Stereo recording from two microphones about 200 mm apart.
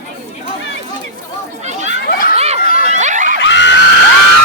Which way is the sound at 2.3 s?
30° right (ahead or behind).